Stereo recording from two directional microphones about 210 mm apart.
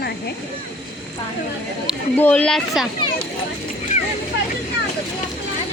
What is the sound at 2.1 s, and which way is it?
Speech, 10° left (ahead or behind).